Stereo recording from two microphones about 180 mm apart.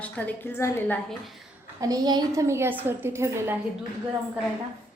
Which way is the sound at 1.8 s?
20° right (ahead or behind).